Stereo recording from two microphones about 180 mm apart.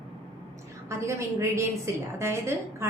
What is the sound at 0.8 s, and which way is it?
A woman's voice, 15° right (ahead or behind).